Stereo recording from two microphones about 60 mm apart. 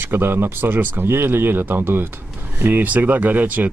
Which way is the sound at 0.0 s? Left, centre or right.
Right.